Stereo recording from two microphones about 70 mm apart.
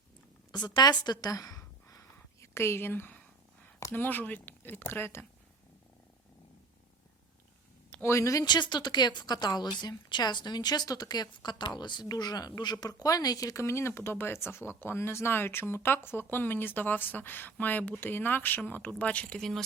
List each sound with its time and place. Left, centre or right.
0.5 s a woman's voice: left
1.3 s a sound: left
3.9 s speech: left
8.0 s speech: left
8.4 s a woman's voice: left; by 19.4 s centre
19.4 s speech: centre